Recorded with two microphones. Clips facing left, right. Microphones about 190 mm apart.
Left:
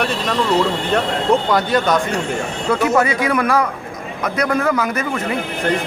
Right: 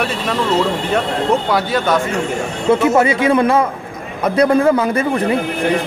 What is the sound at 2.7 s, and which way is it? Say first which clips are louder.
A man's voice: right 4 dB; 25° right (ahead or behind).